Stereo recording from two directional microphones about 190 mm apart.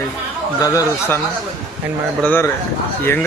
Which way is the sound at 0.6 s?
15° left (ahead or behind).